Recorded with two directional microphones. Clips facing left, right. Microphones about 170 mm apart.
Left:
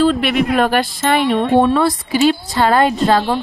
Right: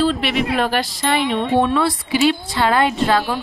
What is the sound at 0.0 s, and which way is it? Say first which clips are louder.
A woman's voice: left 4 dB; 50° left (ahead or behind).